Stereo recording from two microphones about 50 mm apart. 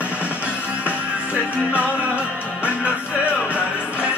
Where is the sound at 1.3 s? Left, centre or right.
Right.